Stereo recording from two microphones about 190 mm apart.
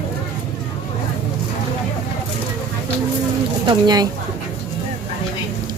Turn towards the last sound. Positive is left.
turn(degrees=-20)  # may be behind; listen again after turning